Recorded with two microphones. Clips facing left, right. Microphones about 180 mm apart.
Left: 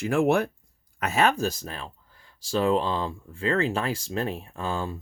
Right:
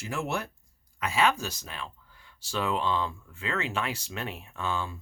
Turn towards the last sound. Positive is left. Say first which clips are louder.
# left 3 dB
turn(degrees=35)  # may be behind; listen again after turning